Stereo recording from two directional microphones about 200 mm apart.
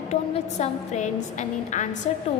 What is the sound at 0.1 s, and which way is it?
A woman's voice, 35° left (ahead or behind).